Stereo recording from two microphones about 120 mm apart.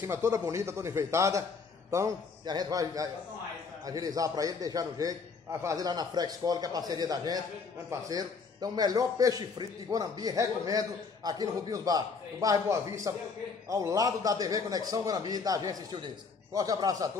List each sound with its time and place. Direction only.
0.0 s a man's voice: 25° right (ahead or behind)